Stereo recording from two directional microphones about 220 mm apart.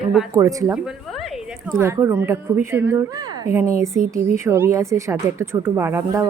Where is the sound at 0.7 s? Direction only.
5° right (ahead or behind).